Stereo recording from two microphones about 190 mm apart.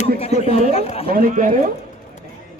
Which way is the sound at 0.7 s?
30° left (ahead or behind).